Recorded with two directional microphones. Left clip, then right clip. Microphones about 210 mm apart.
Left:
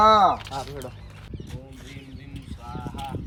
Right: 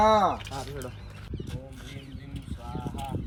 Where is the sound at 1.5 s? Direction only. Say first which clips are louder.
Even; 45° left (ahead or behind).